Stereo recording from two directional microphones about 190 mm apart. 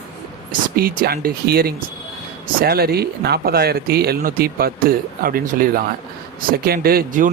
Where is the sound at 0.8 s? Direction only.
50° right (ahead or behind).